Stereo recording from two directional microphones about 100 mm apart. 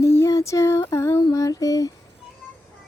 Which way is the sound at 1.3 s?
35° left (ahead or behind).